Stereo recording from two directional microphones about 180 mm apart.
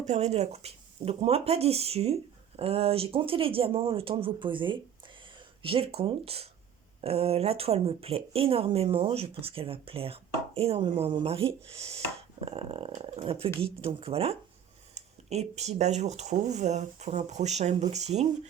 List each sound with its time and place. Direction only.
0.0 s speech: 40° right (ahead or behind)